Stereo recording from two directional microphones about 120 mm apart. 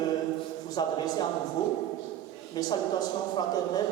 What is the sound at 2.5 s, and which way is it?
Speech, 35° left (ahead or behind).